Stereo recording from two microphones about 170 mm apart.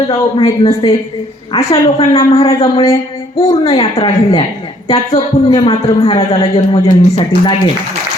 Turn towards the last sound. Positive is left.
turn(degrees=35)  # may be behind; listen again after turning